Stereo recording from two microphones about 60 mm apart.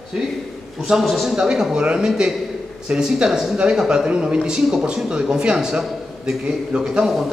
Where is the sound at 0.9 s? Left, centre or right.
Centre.